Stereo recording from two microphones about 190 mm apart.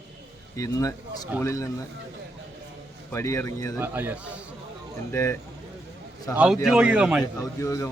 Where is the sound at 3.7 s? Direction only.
10° right (ahead or behind).